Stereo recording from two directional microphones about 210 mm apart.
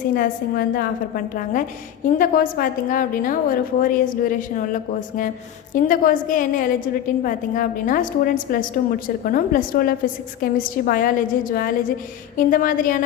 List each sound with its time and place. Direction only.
0.2 s a woman's voice: 45° left (ahead or behind)